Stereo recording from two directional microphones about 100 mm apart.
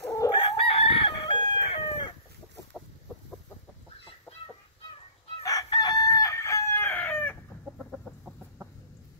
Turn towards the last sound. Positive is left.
turn(degrees=15)  # may be behind; listen again after turning